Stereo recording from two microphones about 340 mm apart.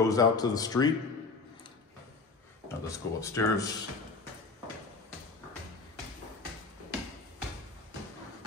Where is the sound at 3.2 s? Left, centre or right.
Centre.